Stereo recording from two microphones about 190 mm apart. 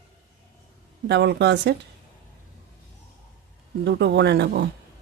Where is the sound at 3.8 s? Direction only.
65° right (ahead or behind).